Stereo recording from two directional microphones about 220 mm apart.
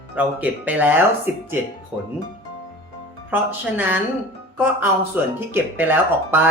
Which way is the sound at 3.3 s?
10° right (ahead or behind).